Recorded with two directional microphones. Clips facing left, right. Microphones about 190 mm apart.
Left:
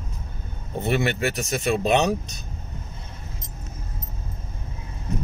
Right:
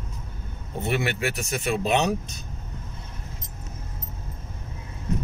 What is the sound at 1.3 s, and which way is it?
Speech, 40° left (ahead or behind).